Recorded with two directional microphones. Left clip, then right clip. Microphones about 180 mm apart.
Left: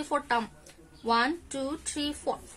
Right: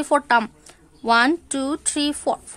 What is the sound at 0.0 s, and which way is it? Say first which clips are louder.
Speech: right 11 dB; 60° right (ahead or behind).